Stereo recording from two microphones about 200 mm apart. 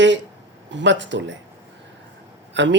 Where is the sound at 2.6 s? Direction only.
65° right (ahead or behind).